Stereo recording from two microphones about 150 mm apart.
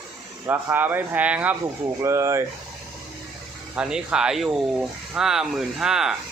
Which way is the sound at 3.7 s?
5° right (ahead or behind).